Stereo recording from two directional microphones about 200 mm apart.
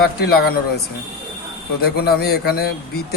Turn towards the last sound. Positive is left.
turn(degrees=50)  # may be behind; listen again after turning